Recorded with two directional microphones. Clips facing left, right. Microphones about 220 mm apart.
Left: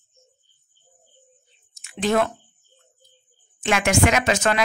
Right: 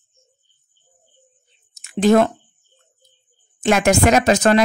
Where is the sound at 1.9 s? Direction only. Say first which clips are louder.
Right 7 dB; 45° right (ahead or behind).